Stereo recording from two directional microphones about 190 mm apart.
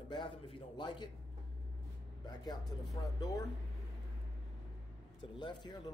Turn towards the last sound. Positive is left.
turn(degrees=25)  # may be behind; listen again after turning